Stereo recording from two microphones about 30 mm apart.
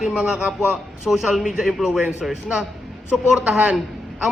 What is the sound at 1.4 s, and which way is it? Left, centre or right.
Speech, right.